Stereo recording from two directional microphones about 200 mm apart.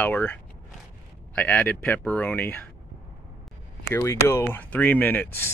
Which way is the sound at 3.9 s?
15° left (ahead or behind).